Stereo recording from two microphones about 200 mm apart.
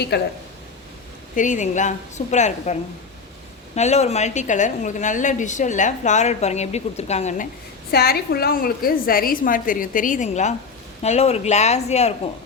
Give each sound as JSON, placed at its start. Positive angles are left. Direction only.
{"t": 0.1, "sound": "speech", "side_deg": 55}
{"t": 1.4, "sound": "a woman's voice", "side_deg": 40}
{"t": 3.8, "sound": "a woman's voice", "side_deg": 35}
{"t": 7.9, "sound": "a woman's voice", "side_deg": 50}